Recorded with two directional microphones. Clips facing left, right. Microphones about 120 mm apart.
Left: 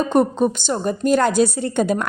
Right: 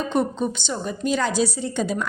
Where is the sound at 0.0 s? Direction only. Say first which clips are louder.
Left 6 dB; 45° left (ahead or behind).